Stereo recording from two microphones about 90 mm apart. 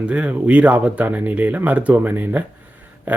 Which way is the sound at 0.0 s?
15° right (ahead or behind).